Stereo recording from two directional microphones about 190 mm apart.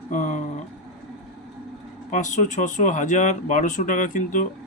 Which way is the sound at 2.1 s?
40° left (ahead or behind).